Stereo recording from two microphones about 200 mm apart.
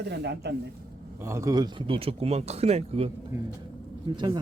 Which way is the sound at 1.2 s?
15° right (ahead or behind).